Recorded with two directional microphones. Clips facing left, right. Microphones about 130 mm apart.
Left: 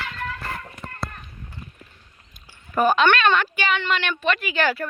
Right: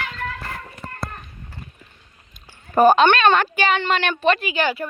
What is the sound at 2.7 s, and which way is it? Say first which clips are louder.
A woman's voice: right 5 dB; 35° right (ahead or behind).